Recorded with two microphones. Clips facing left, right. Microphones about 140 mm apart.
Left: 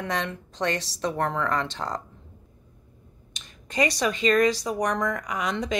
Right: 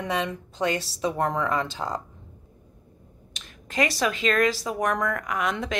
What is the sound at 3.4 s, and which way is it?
Speech, centre (ahead or behind).